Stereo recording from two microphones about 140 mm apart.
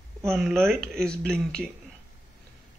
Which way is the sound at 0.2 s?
Centre (ahead or behind).